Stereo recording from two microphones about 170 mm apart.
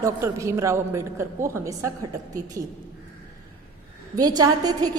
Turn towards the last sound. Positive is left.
turn(degrees=-25)  # may be behind; listen again after turning